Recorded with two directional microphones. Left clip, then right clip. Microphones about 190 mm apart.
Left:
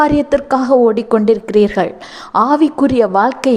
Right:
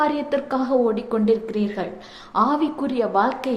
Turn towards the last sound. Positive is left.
turn(degrees=45)  # may be behind; listen again after turning